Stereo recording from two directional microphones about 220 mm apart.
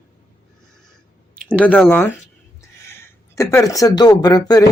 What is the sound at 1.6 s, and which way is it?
Speech, 5° left (ahead or behind).